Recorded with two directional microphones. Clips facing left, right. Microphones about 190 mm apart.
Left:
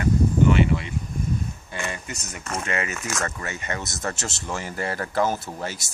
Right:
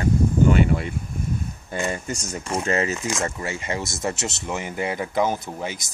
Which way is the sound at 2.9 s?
15° right (ahead or behind).